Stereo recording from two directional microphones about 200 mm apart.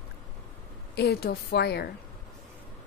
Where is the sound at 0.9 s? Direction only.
55° left (ahead or behind).